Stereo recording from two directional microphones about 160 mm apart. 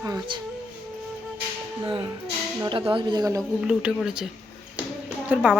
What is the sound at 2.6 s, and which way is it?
Speech, 30° right (ahead or behind).